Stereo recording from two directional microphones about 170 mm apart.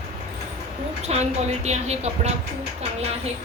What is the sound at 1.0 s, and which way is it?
A woman's voice, 40° right (ahead or behind).